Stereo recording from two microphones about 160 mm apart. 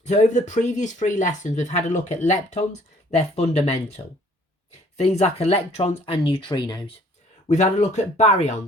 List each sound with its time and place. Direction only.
0.0 s speech: 50° left (ahead or behind); by 6.9 s 25° left (ahead or behind)
7.4 s speech: 45° left (ahead or behind)